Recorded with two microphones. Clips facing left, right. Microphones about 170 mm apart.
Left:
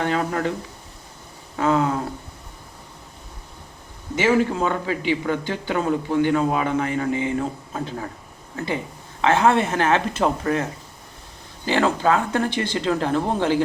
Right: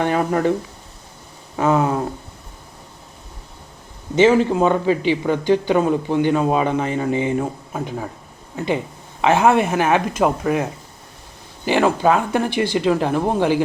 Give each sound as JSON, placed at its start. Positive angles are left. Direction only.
{"t": 0.0, "sound": "speech", "side_deg": -15}
{"t": 1.5, "sound": "a sound", "side_deg": -20}
{"t": 4.1, "sound": "speech", "side_deg": -20}